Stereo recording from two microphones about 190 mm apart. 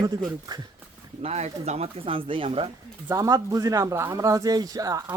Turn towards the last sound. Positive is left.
turn(degrees=-20)  # may be behind; listen again after turning